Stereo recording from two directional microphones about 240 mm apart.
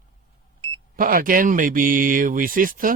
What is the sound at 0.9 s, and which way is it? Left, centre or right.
Speech, right.